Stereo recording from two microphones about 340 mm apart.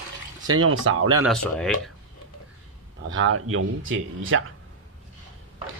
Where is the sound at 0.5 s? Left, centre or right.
Right.